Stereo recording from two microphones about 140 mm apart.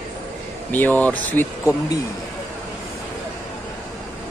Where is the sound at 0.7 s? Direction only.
15° left (ahead or behind).